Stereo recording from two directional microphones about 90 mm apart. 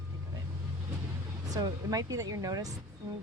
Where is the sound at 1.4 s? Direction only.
45° right (ahead or behind).